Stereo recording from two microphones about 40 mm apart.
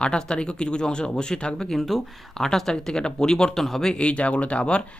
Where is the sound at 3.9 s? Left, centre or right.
Left.